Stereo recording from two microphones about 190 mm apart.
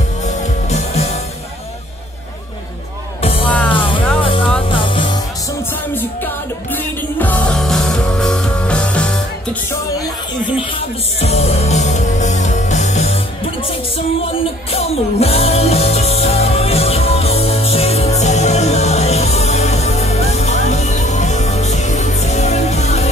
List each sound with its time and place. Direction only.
0.7 s music: 35° left (ahead or behind)
3.2 s music: 30° left (ahead or behind)
6.7 s music: 10° left (ahead or behind)
11.1 s music: 35° left (ahead or behind)
14.7 s music: 30° left (ahead or behind)